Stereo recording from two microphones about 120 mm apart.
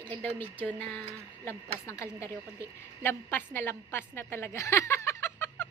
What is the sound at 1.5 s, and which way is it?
A woman's voice, 25° left (ahead or behind).